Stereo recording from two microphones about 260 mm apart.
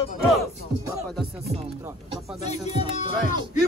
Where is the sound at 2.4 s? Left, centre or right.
Left.